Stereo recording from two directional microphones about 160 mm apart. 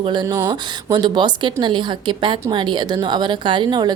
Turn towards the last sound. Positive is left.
turn(degrees=-25)  # may be behind; listen again after turning